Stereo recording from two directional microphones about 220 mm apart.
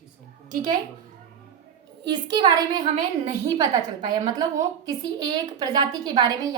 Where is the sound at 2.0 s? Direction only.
20° right (ahead or behind).